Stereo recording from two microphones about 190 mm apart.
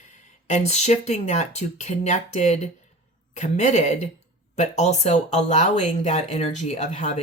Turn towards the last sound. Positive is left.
turn(degrees=35)  # may be behind; listen again after turning